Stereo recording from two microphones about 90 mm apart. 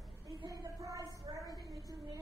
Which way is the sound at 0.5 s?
40° right (ahead or behind).